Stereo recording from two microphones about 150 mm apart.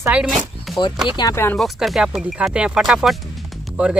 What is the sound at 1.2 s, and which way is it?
Speech, 20° left (ahead or behind).